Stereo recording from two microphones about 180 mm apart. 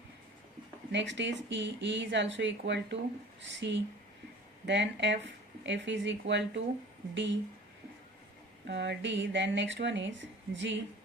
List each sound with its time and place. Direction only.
0.9 s speech: 80° right
8.6 s speech: 75° right (ahead or behind); by 10.8 s 90° right